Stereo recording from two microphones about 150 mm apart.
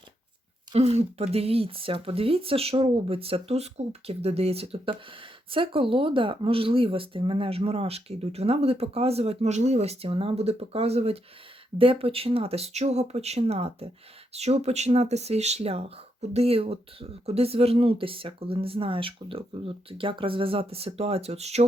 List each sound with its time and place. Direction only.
0.7 s speech: 45° right (ahead or behind)